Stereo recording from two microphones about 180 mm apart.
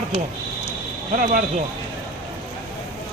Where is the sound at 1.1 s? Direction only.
45° right (ahead or behind).